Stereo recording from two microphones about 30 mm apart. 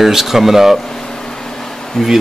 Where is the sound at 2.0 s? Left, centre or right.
Centre.